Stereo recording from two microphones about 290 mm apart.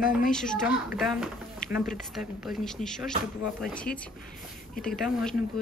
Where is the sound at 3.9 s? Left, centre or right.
Left.